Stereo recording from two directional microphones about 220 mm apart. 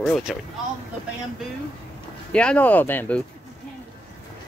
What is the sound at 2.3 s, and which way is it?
Speech, 5° left (ahead or behind).